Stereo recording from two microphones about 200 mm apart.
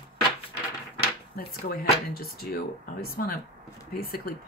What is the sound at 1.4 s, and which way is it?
Speech, 50° left (ahead or behind).